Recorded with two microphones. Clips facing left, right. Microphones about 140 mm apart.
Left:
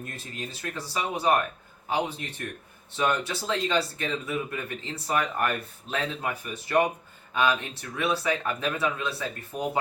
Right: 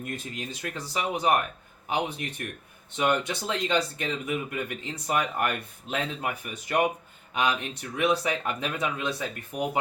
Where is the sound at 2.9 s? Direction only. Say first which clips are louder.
Right 1 dB; 20° right (ahead or behind).